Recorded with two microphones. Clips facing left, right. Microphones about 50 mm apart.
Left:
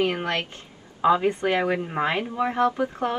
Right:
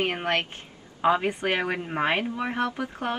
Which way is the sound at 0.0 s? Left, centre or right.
Right.